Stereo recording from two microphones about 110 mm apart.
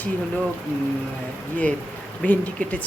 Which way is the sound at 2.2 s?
15° left (ahead or behind).